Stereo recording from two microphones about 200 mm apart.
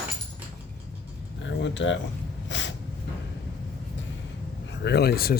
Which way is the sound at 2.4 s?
65° left (ahead or behind).